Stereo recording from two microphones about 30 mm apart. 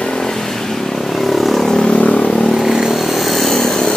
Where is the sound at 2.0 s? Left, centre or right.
Left.